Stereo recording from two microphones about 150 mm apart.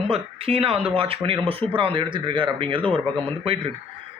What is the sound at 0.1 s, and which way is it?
Speech, 40° right (ahead or behind).